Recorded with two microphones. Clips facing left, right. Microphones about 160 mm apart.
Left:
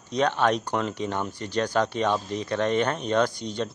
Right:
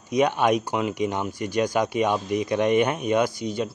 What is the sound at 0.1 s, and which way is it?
Speech, 10° right (ahead or behind).